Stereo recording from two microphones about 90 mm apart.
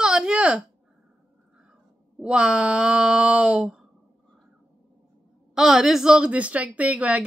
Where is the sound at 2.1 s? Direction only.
10° right (ahead or behind).